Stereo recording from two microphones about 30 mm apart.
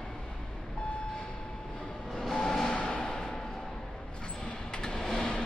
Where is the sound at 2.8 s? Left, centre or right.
Left.